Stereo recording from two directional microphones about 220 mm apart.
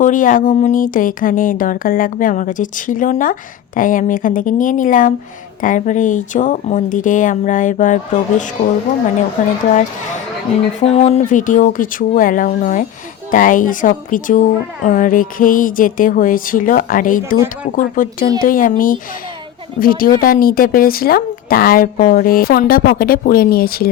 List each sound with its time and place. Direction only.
0.0 s a woman's voice: 35° left (ahead or behind)
10.8 s a woman's voice: 30° left (ahead or behind)